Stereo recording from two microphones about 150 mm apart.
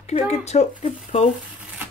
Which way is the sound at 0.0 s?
45° left (ahead or behind).